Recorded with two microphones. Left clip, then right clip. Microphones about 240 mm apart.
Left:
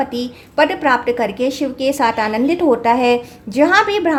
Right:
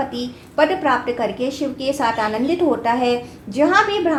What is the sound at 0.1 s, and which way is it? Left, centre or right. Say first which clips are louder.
A woman's voice: left 4 dB; left.